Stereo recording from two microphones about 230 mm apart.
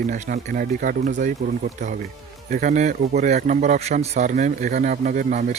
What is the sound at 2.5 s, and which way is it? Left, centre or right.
Speech, right.